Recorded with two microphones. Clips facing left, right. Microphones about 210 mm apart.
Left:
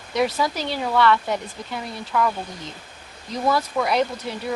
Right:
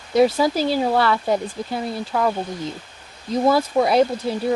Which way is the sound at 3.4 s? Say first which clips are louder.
Right 4 dB; 30° right (ahead or behind).